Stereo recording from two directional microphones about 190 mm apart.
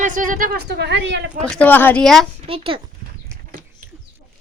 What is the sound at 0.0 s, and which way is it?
Speech, 45° right (ahead or behind).